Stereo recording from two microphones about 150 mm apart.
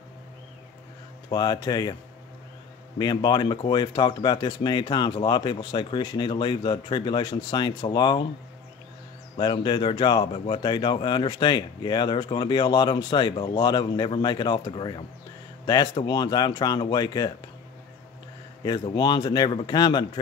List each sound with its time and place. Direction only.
1.3 s speech: 25° left (ahead or behind)
3.0 s speech: 30° left (ahead or behind)
9.4 s speech: 30° left (ahead or behind)
18.6 s speech: 30° left (ahead or behind)